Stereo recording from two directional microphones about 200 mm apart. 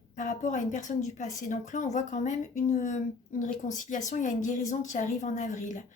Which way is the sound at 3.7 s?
40° left (ahead or behind).